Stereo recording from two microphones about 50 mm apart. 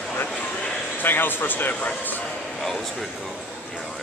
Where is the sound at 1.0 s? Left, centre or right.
Left.